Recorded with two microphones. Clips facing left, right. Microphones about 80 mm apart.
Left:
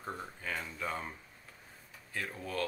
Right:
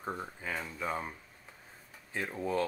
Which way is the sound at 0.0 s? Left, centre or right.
Centre.